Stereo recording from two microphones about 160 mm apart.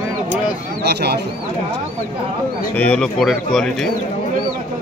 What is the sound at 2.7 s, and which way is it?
Speech, 10° left (ahead or behind).